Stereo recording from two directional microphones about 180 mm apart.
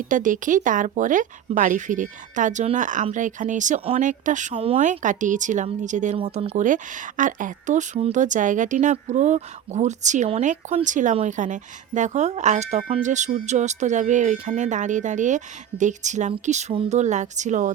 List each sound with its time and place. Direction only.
0.1 s speech: 45° right (ahead or behind)